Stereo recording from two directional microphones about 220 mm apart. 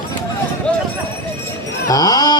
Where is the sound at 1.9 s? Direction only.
15° left (ahead or behind).